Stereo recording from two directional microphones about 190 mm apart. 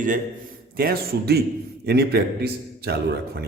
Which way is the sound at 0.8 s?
55° right (ahead or behind).